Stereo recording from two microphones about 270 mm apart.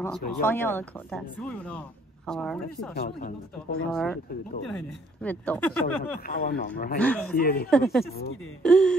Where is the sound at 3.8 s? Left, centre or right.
Centre.